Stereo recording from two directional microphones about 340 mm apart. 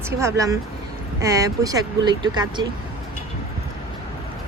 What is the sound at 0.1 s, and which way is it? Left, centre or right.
A woman's voice, centre.